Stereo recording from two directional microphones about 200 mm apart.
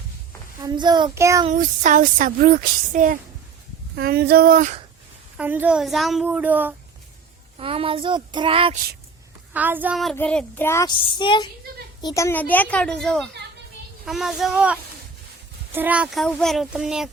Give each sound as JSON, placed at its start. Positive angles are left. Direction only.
{"t": 0.6, "sound": "child singing", "side_deg": -20}
{"t": 1.5, "sound": "speech", "side_deg": -40}
{"t": 5.4, "sound": "speech", "side_deg": -10}
{"t": 7.6, "sound": "child singing", "side_deg": -25}
{"t": 9.5, "sound": "a child's voice", "side_deg": -10}